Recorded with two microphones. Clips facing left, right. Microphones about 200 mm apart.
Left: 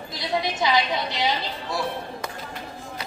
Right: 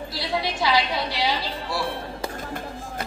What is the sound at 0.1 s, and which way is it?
A woman's voice, 20° left (ahead or behind).